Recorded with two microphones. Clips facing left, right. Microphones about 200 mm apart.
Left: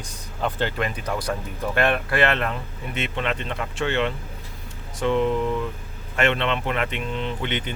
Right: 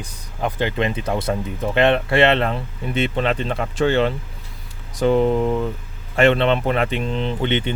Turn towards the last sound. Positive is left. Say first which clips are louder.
# right 6 dB
turn(degrees=-30)  # may be behind; listen again after turning